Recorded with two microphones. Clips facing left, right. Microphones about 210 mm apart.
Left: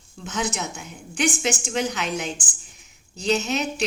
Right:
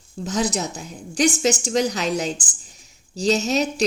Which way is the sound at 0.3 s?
35° right (ahead or behind).